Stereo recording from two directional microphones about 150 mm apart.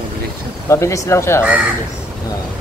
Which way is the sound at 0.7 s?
20° left (ahead or behind).